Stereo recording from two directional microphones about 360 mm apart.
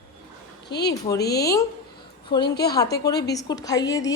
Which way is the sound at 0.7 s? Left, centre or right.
Left.